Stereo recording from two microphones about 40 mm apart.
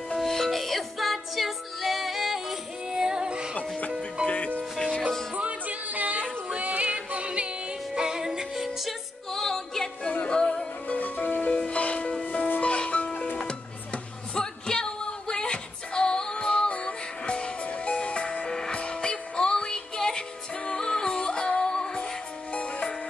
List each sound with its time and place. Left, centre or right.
0.2 s music: centre
2.9 s music: centre
7.9 s music: centre
8.6 s music: centre
10.2 s music: left
10.9 s music: left
14.3 s music: centre
22.5 s music: left